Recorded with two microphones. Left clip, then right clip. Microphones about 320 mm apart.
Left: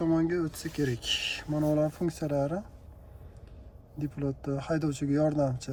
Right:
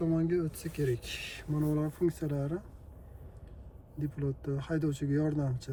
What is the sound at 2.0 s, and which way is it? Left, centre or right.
Speech, left.